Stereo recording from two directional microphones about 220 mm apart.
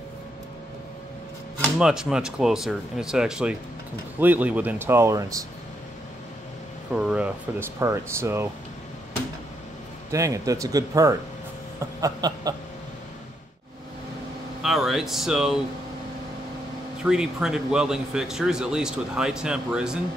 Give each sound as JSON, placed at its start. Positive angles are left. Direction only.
{"t": 1.6, "sound": "speech", "side_deg": -5}
{"t": 6.9, "sound": "speech", "side_deg": -5}
{"t": 10.1, "sound": "speech", "side_deg": -15}
{"t": 14.6, "sound": "speech", "side_deg": 0}
{"t": 17.0, "sound": "speech", "side_deg": -5}